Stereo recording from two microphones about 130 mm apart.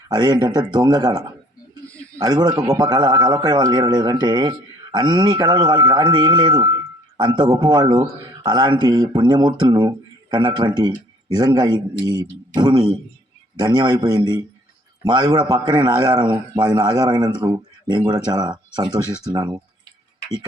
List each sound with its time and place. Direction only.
0.1 s a man's voice: 35° right (ahead or behind)